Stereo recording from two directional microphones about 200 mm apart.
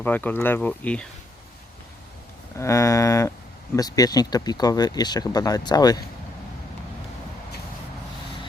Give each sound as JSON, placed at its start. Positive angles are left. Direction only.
{"t": 0.0, "sound": "speech", "side_deg": 10}
{"t": 2.6, "sound": "speech", "side_deg": 15}